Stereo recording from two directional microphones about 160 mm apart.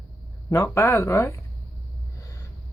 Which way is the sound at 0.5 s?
20° left (ahead or behind).